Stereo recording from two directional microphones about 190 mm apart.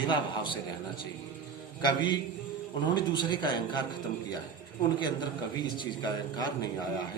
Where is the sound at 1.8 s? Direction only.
20° left (ahead or behind).